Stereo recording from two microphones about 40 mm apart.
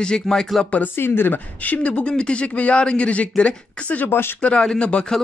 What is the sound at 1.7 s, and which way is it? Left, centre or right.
Speech, left.